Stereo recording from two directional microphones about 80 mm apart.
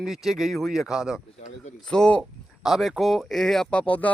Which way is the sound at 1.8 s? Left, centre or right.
Centre.